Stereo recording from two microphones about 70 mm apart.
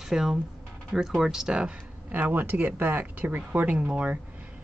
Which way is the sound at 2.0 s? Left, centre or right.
Right.